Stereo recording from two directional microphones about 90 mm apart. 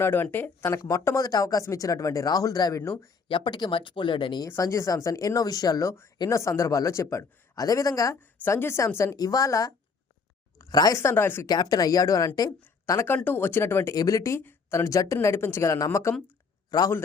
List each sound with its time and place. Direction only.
0.0 s speech: 25° left (ahead or behind)
0.9 s speech: 35° left (ahead or behind)
3.2 s speech: 65° left (ahead or behind)
4.6 s speech: 35° left (ahead or behind)
8.1 s speech: 25° left (ahead or behind)
9.1 s speech: 45° left (ahead or behind)
11.0 s speech: 25° left (ahead or behind)
11.4 s a woman's voice: 50° left (ahead or behind); by 13.9 s 25° left (ahead or behind)
13.9 s speech: 40° left (ahead or behind)
14.3 s speech: 30° left (ahead or behind)
16.7 s speech: 45° left (ahead or behind)